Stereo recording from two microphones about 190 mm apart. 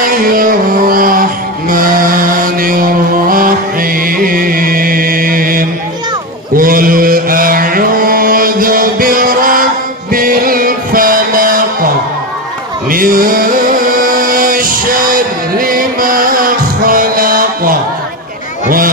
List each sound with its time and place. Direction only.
0.0 s music: 50° right (ahead or behind)
1.7 s mantra: 50° right (ahead or behind)
10.1 s music: 50° right (ahead or behind)
12.9 s music: 50° right (ahead or behind)